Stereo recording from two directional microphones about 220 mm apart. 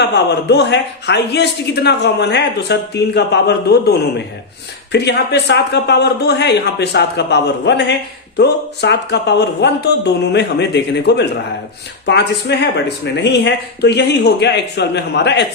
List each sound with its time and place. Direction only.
0.0 s a man's voice: 50° left (ahead or behind)